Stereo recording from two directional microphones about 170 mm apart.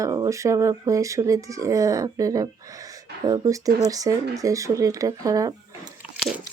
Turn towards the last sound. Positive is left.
turn(degrees=0)  # may be behind; listen again after turning